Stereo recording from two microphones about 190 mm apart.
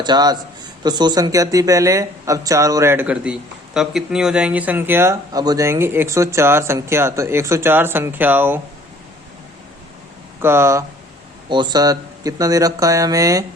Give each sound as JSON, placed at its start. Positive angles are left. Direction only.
{"t": 0.0, "sound": "speech", "side_deg": -20}
{"t": 10.4, "sound": "speech", "side_deg": -15}